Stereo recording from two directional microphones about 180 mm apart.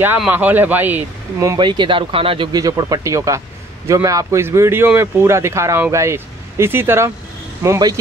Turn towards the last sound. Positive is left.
turn(degrees=-20)  # may be behind; listen again after turning